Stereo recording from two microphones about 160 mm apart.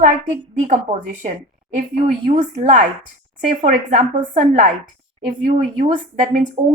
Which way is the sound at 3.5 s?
50° right (ahead or behind).